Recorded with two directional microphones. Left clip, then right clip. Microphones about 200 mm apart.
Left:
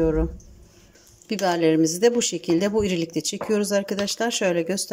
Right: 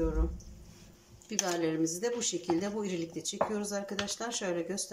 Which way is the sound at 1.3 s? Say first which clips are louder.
Left 12 dB; 40° left (ahead or behind).